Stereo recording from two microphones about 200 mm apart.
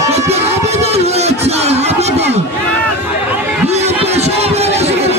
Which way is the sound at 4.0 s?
30° right (ahead or behind).